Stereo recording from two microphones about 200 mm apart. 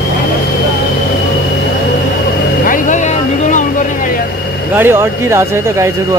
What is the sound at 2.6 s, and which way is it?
Vehicle, 40° left (ahead or behind).